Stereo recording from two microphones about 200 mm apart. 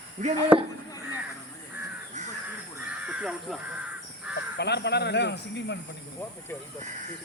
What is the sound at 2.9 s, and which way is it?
Crow, 5° right (ahead or behind).